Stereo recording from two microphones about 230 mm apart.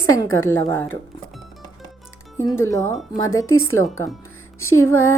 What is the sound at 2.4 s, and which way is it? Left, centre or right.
A woman's voice, centre.